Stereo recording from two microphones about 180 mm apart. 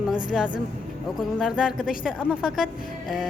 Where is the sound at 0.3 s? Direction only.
5° right (ahead or behind).